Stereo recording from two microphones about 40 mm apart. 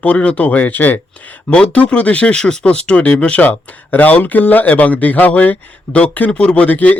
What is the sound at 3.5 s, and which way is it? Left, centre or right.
Speech, left.